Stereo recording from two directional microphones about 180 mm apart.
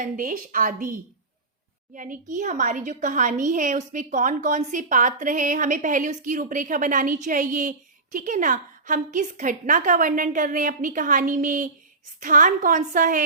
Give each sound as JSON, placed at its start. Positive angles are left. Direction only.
{"t": 0.0, "sound": "a woman's voice", "side_deg": -50}
{"t": 2.0, "sound": "a woman's voice", "side_deg": -45}